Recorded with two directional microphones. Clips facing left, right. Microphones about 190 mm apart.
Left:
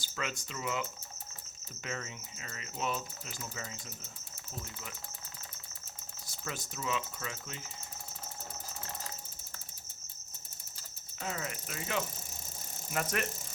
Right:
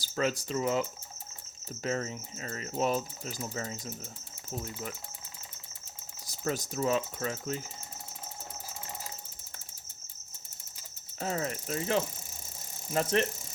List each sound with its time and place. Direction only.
0.0 s cricket: 40° right (ahead or behind)
6.2 s cricket: 40° right (ahead or behind)
11.2 s cricket: 35° right (ahead or behind)